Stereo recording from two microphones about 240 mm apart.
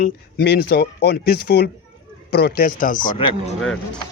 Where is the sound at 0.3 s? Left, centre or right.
Left.